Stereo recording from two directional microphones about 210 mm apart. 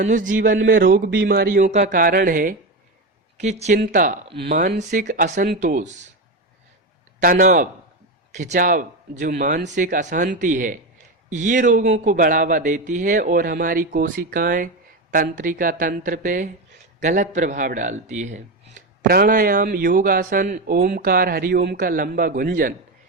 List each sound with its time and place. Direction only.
0.0 s a man's voice: 40° right (ahead or behind)
7.2 s a man's voice: 40° right (ahead or behind)